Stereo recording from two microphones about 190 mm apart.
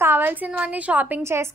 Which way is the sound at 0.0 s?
10° right (ahead or behind).